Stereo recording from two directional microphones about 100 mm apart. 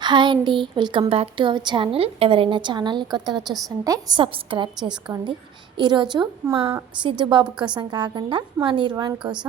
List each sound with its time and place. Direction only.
0.0 s speech: 50° right (ahead or behind); by 1.5 s 65° right (ahead or behind)
1.5 s a woman's voice: 50° right (ahead or behind)
4.2 s a woman's voice: 55° right (ahead or behind)